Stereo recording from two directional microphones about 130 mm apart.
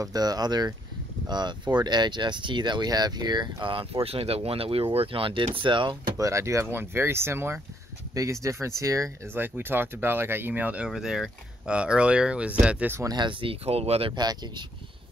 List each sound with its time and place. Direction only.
0.0 s speech: 30° right (ahead or behind); by 12.9 s 10° right (ahead or behind)
12.9 s speech: 30° right (ahead or behind); by 14.1 s 50° right (ahead or behind)
14.1 s speech: 35° right (ahead or behind)